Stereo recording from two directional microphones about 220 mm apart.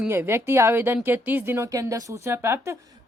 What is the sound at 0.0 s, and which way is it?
Speech, 10° right (ahead or behind).